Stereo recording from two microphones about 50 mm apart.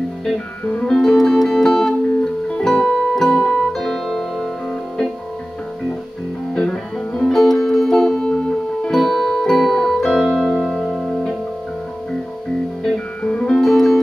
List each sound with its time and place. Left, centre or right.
0.8 s music: centre
2.2 s music: centre
3.7 s music: centre
6.5 s music: centre
7.3 s music: centre
12.8 s music: centre
13.6 s music: centre